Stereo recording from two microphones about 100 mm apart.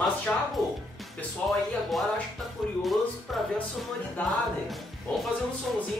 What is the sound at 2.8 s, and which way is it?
Speech, centre (ahead or behind).